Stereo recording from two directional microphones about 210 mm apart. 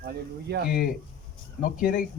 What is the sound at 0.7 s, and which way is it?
Speech, 45° left (ahead or behind).